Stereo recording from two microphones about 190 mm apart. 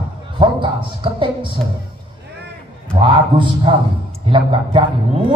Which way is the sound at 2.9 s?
25° right (ahead or behind).